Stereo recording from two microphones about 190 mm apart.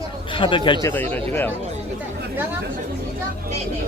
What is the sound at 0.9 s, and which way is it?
Speech, 10° left (ahead or behind).